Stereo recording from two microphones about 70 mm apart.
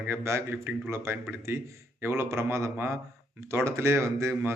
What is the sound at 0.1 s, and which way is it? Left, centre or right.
A man's voice, right.